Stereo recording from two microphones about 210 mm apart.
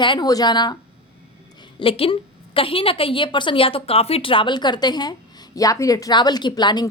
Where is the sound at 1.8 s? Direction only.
25° left (ahead or behind).